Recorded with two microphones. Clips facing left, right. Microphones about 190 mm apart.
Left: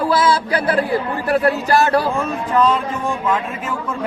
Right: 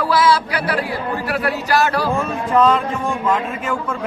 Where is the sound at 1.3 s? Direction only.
25° left (ahead or behind).